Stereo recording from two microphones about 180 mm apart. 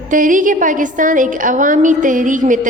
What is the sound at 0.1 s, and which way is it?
Speech, 45° right (ahead or behind).